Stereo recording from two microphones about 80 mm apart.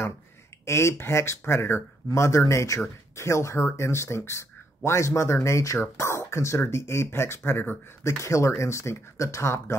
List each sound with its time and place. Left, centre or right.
0.7 s speech: left